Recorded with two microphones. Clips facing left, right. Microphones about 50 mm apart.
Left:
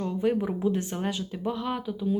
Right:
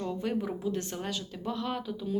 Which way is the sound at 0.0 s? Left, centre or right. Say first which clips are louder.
Left 6 dB; centre.